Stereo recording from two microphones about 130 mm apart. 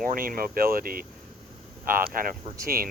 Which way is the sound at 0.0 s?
90° right.